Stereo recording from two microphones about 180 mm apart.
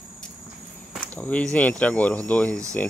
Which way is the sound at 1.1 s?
10° left (ahead or behind).